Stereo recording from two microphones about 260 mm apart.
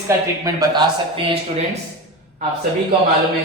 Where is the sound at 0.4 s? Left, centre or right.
Centre.